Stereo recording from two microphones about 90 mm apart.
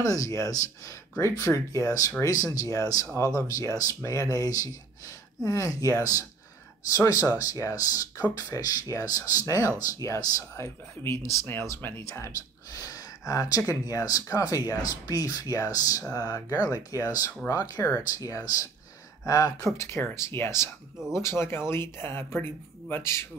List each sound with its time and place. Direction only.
0.0 s speech: 40° left (ahead or behind)
19.8 s speech: 30° left (ahead or behind)